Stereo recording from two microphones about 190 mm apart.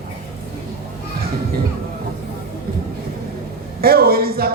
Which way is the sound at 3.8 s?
55° right (ahead or behind).